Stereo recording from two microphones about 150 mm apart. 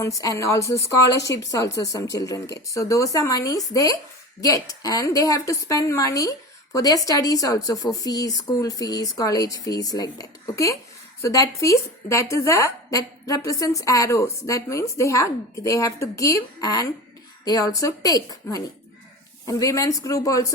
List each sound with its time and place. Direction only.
0.0 s a woman's voice: 20° left (ahead or behind)